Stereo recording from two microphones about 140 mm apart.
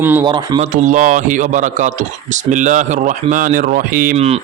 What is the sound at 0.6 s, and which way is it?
A man's voice, 60° right (ahead or behind).